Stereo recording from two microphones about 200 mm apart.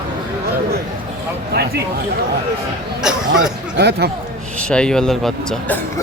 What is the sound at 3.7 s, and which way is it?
Speech, 55° right (ahead or behind).